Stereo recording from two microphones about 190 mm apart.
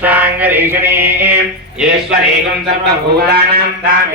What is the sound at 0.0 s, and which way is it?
Mantra, 10° right (ahead or behind).